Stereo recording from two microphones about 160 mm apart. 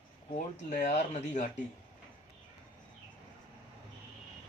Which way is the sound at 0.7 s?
50° left (ahead or behind).